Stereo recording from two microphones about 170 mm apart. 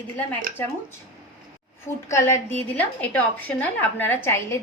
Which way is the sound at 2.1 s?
15° left (ahead or behind).